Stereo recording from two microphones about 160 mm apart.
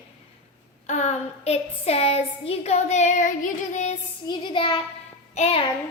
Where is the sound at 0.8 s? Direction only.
45° left (ahead or behind).